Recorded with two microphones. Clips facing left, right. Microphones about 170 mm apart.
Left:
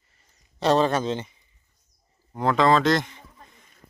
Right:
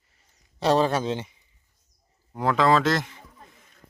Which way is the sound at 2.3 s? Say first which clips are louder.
Left 1 dB; 5° right (ahead or behind).